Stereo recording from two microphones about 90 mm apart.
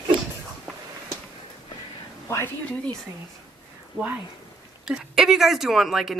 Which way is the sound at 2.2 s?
35° left (ahead or behind).